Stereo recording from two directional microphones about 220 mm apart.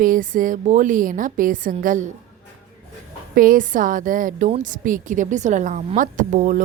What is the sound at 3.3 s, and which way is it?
Speech, 40° right (ahead or behind).